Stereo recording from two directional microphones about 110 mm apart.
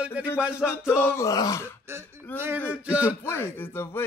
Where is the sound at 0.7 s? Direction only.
20° left (ahead or behind).